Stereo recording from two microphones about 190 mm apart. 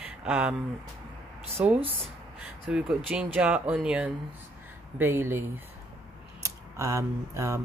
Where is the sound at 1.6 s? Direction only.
5° right (ahead or behind).